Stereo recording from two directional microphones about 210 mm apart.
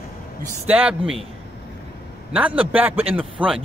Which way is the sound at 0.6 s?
5° right (ahead or behind).